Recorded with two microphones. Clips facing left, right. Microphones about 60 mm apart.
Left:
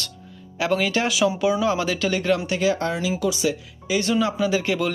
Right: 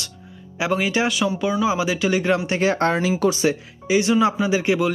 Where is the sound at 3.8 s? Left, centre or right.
Centre.